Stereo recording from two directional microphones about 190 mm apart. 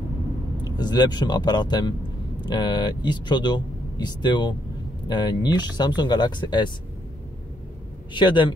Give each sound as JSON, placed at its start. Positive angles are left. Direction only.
{"t": 0.7, "sound": "speech", "side_deg": 20}
{"t": 8.1, "sound": "speech", "side_deg": 25}